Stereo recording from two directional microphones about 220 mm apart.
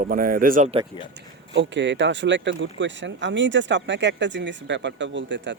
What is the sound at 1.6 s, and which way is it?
Speech, 55° right (ahead or behind).